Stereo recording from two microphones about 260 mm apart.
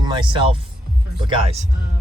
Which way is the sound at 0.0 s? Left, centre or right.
Centre.